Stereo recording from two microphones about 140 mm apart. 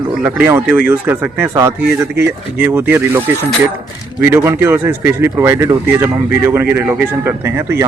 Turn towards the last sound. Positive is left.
turn(degrees=-15)  # may be behind; listen again after turning